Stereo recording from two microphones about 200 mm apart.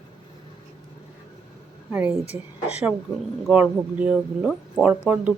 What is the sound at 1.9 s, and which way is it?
Speech, 10° right (ahead or behind).